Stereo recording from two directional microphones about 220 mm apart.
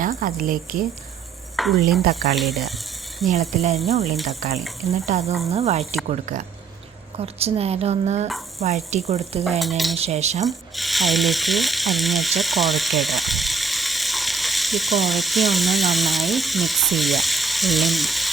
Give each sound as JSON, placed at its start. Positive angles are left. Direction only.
{"t": 0.0, "sound": "speech", "side_deg": -40}
{"t": 1.5, "sound": "speech", "side_deg": 0}
{"t": 2.0, "sound": "speech", "side_deg": -45}
{"t": 2.3, "sound": "cutlery", "side_deg": 0}
{"t": 3.5, "sound": "a woman's voice", "side_deg": -30}
{"t": 4.1, "sound": "cutlery", "side_deg": 0}
{"t": 4.9, "sound": "a woman's voice", "side_deg": -30}
{"t": 6.1, "sound": "cutlery", "side_deg": -35}
{"t": 7.2, "sound": "a woman's voice", "side_deg": -25}
{"t": 9.6, "sound": "cutlery", "side_deg": 0}
{"t": 10.0, "sound": "cutlery", "side_deg": -30}
{"t": 10.4, "sound": "speech", "side_deg": 0}